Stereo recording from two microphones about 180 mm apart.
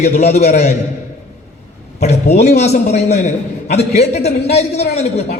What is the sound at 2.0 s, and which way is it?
A man's voice, 40° left (ahead or behind).